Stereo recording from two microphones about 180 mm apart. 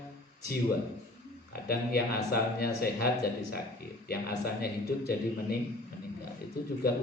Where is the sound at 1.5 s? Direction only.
60° left (ahead or behind).